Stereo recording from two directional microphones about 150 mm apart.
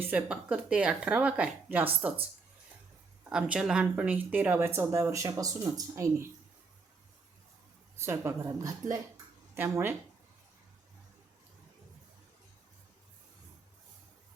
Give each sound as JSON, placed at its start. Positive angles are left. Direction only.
{"t": 0.0, "sound": "speech", "side_deg": -10}
{"t": 3.2, "sound": "speech", "side_deg": -10}
{"t": 7.9, "sound": "a woman's voice", "side_deg": -15}